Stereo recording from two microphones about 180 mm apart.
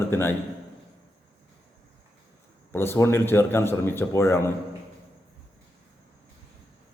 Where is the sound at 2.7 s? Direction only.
15° left (ahead or behind).